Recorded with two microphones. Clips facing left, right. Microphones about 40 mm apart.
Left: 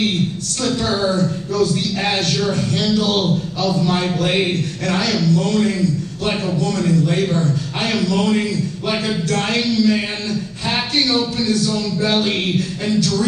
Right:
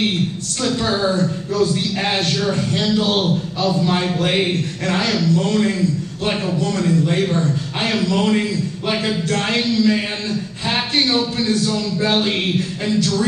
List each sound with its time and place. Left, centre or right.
0.6 s a man's voice: centre
1.2 s a man's voice: centre
11.4 s a man's voice: right
12.0 s a man's voice: centre